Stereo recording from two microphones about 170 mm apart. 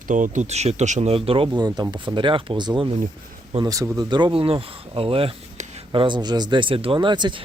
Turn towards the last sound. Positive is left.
turn(degrees=-25)  # may be behind; listen again after turning